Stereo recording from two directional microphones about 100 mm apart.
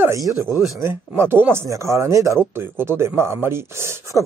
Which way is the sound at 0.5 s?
Centre (ahead or behind).